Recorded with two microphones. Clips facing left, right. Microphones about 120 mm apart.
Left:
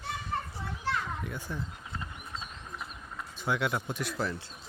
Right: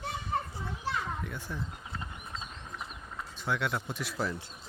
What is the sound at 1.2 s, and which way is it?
Speech, centre (ahead or behind).